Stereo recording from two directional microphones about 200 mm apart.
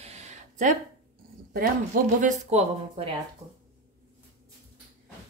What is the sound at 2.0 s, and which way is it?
Speech, 40° right (ahead or behind).